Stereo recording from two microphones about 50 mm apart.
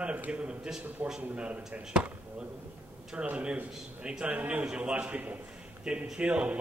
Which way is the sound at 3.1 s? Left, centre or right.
Right.